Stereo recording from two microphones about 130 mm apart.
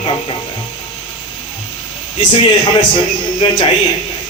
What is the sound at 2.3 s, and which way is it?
Speech, 35° left (ahead or behind).